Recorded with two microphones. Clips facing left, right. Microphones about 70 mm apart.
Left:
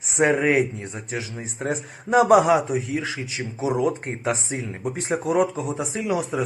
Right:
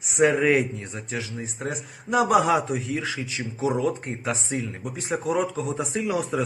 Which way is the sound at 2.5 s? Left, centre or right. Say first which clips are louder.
Left 3 dB; centre.